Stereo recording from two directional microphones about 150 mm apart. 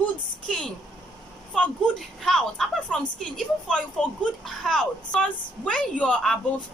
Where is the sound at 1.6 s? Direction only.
5° left (ahead or behind).